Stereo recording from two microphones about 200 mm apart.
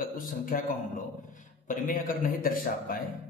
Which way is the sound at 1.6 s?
40° left (ahead or behind).